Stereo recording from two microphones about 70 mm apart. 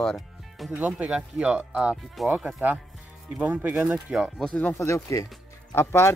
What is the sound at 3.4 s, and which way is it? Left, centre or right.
Speech, right.